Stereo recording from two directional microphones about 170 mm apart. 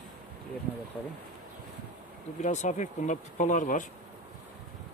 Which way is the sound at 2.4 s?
45° left (ahead or behind).